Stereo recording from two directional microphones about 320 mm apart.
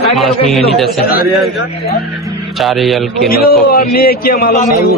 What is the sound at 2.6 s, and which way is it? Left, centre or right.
Speech, centre.